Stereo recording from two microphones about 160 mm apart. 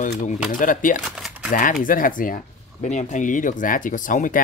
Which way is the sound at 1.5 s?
55° left (ahead or behind).